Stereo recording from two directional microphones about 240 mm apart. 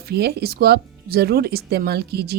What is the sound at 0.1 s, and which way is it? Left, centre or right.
Speech, right.